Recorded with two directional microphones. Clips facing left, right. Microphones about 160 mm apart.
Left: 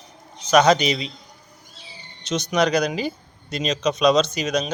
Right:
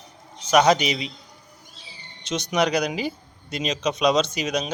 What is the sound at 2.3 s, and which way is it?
A man's voice, 15° right (ahead or behind).